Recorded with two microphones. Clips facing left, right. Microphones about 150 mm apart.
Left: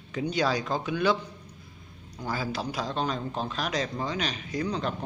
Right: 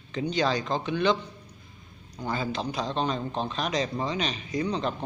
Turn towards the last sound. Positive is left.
turn(degrees=0)  # may be behind; listen again after turning